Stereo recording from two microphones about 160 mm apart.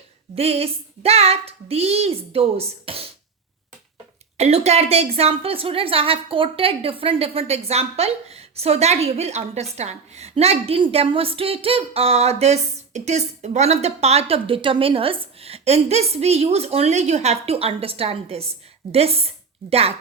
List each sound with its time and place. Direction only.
0.3 s a woman's voice: 40° right (ahead or behind)
4.4 s a woman's voice: 40° right (ahead or behind)